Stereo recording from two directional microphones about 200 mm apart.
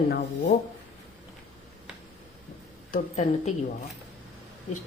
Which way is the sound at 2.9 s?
35° left (ahead or behind).